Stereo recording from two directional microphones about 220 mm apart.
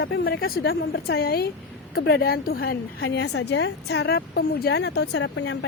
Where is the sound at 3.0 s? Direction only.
60° left (ahead or behind).